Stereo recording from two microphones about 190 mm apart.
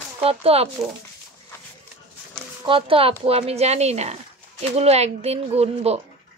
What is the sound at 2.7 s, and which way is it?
Speech, 30° right (ahead or behind).